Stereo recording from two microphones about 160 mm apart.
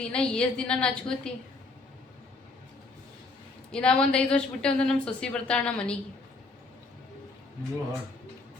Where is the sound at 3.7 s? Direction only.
5° left (ahead or behind).